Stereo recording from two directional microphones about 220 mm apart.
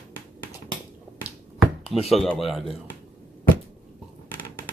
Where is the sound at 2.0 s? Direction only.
Centre (ahead or behind).